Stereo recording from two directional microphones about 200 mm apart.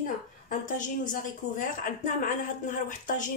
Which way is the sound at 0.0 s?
40° left (ahead or behind).